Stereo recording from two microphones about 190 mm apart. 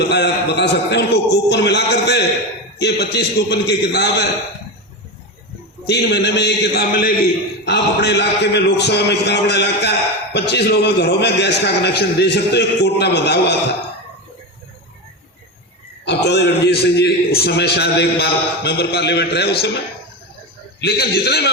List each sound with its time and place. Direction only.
0.0 s a man's voice: 60° left (ahead or behind)
5.8 s a man's voice: 60° left (ahead or behind)
16.0 s a man's voice: 65° left (ahead or behind)
20.8 s a man's voice: 55° left (ahead or behind)